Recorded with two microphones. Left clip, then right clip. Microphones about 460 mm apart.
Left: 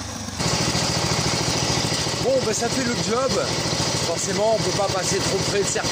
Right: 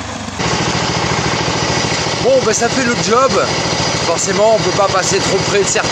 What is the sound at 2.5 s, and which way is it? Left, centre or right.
Speech, right.